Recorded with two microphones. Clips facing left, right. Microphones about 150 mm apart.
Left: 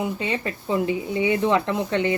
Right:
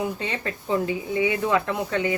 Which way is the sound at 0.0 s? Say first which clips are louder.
Left 2 dB; 15° left (ahead or behind).